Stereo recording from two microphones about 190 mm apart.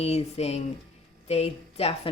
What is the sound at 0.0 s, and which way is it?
A woman's voice, 35° left (ahead or behind).